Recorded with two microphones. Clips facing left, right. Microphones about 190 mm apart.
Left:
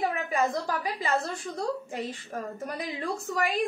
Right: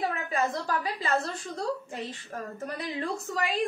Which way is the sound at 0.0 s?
10° left (ahead or behind).